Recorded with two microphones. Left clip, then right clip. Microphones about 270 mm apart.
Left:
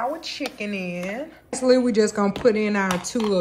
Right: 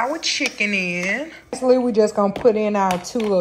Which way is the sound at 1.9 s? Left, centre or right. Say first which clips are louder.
Right 3 dB; left.